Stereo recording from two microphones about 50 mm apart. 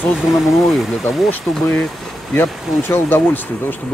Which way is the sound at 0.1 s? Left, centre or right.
Centre.